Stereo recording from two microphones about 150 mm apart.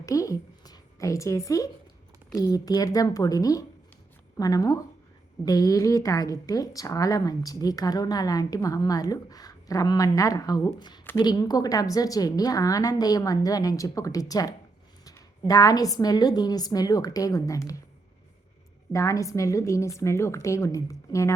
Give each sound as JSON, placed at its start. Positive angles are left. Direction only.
{"t": 0.0, "sound": "a sound", "side_deg": 20}
{"t": 2.3, "sound": "a woman's voice", "side_deg": 25}
{"t": 18.9, "sound": "a woman's voice", "side_deg": 20}